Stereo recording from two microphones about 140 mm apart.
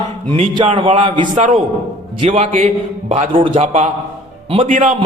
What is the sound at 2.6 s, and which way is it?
A man's voice, 45° right (ahead or behind).